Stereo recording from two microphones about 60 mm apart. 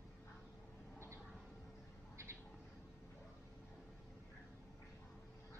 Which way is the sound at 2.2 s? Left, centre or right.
Right.